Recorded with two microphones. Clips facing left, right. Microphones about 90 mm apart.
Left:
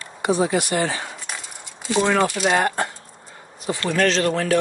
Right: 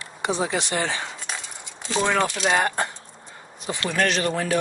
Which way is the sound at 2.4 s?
60° left (ahead or behind).